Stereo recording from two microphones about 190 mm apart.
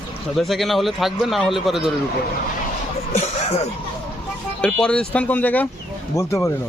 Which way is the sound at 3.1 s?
35° left (ahead or behind).